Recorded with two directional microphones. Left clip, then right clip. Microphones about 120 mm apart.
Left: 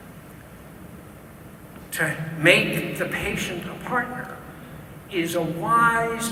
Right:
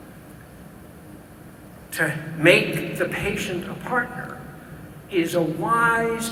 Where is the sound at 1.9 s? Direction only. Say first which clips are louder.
Right 1 dB; 40° right (ahead or behind).